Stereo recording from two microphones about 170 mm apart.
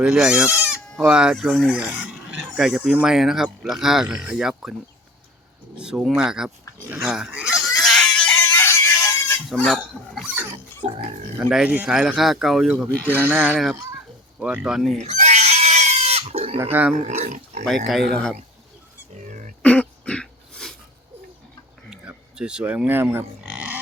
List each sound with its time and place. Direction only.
0.0 s speech: centre (ahead or behind)
5.7 s speech: 5° right (ahead or behind)
6.8 s pig: 10° right (ahead or behind); by 8.9 s 15° left (ahead or behind)
9.5 s speech: centre (ahead or behind)
10.3 s pig: 15° right (ahead or behind)
10.8 s speech: 30° right (ahead or behind)
11.4 s speech: 5° right (ahead or behind)
13.5 s speech: centre (ahead or behind)
15.0 s pig: 45° right (ahead or behind)
16.9 s speech: 40° right (ahead or behind)
18.1 s speech: 5° left (ahead or behind)
19.1 s a sound: 45° right (ahead or behind)
19.6 s cough: 5° left (ahead or behind)
21.8 s a sound: 5° right (ahead or behind)